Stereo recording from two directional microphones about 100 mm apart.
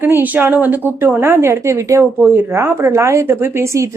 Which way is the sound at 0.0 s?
20° right (ahead or behind).